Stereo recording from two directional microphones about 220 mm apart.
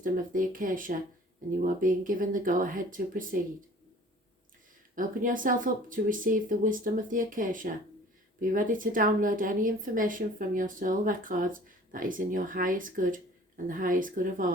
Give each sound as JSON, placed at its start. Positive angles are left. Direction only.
{"t": 0.0, "sound": "speech", "side_deg": -40}
{"t": 4.9, "sound": "speech", "side_deg": -40}